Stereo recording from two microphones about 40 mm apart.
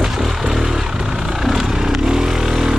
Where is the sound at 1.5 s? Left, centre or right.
Centre.